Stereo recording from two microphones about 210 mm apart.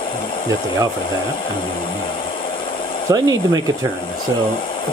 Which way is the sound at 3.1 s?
15° right (ahead or behind).